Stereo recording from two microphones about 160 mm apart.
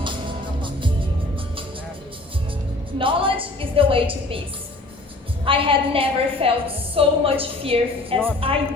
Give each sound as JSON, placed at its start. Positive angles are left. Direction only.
{"t": 0.6, "sound": "music", "side_deg": -30}
{"t": 3.0, "sound": "a woman's voice", "side_deg": -35}
{"t": 5.5, "sound": "a woman's voice", "side_deg": -35}